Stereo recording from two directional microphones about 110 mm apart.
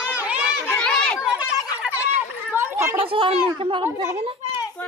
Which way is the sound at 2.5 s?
25° right (ahead or behind).